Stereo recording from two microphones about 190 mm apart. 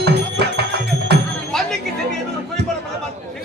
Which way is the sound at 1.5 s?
Centre (ahead or behind).